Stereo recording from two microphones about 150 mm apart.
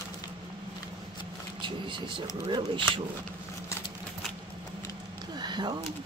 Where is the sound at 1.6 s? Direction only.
35° right (ahead or behind).